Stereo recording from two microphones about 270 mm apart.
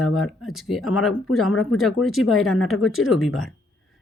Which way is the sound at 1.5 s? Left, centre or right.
Left.